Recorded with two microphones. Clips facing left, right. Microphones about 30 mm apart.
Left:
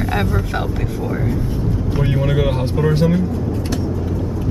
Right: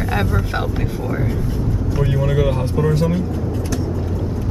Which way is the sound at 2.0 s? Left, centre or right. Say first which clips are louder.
Even; centre.